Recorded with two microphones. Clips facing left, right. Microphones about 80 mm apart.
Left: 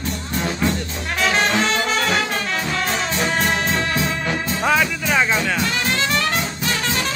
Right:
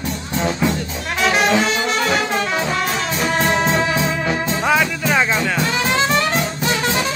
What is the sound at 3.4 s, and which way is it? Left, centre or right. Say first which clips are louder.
Music: right 4 dB; centre.